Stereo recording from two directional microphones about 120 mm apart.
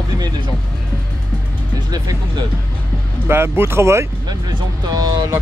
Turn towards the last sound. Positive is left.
turn(degrees=-35)  # may be behind; listen again after turning